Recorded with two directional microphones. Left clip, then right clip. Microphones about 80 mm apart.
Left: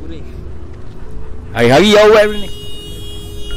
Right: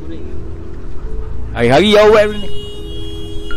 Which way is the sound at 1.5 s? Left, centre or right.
Centre.